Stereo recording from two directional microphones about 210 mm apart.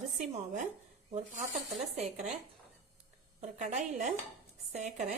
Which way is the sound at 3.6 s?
35° right (ahead or behind).